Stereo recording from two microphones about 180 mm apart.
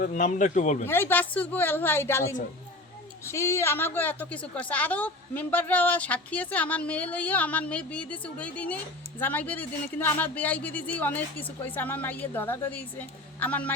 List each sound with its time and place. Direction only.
0.0 s speech: 45° left (ahead or behind)
0.9 s a woman's voice: 10° left (ahead or behind)